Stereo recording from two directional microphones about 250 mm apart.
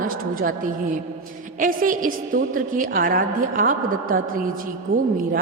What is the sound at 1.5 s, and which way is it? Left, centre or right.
A woman's voice, right.